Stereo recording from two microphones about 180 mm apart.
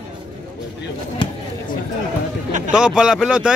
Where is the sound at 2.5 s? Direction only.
45° right (ahead or behind).